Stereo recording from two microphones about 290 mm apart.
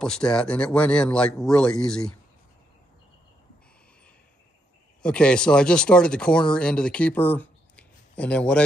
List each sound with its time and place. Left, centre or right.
0.0 s speech: centre
5.0 s speech: centre